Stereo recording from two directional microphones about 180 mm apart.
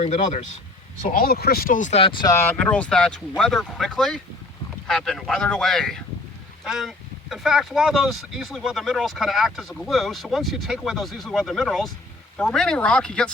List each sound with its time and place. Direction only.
0.0 s speech: 40° left (ahead or behind)
1.0 s speech: 50° left (ahead or behind); by 2.3 s 30° left (ahead or behind)
2.3 s speech: 10° left (ahead or behind)